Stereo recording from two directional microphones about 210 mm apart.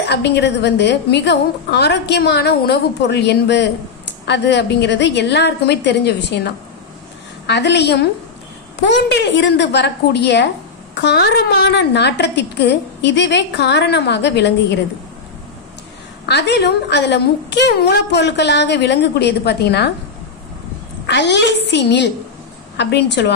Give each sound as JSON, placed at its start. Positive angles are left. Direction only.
{"t": 0.0, "sound": "a woman's voice", "side_deg": 55}
{"t": 16.3, "sound": "a woman's voice", "side_deg": 55}
{"t": 21.1, "sound": "a woman's voice", "side_deg": 55}